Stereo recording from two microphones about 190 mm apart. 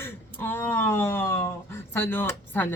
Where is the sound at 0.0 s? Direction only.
10° left (ahead or behind).